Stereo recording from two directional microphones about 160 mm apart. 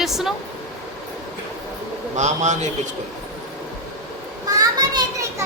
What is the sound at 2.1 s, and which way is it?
Speech, 45° right (ahead or behind).